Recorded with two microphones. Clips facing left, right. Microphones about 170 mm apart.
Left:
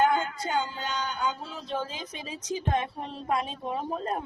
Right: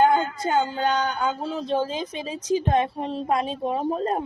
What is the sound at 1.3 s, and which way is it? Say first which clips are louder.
A woman's voice: right 8 dB; 40° right (ahead or behind).